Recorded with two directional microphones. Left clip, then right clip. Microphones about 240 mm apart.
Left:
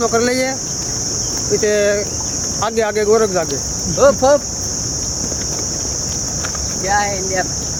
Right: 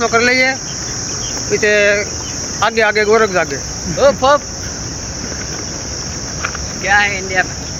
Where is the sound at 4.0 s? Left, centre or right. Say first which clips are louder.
Right 1 dB; left.